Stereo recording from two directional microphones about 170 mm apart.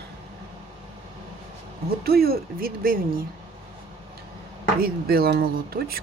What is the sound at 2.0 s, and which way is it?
Speech, 65° right (ahead or behind).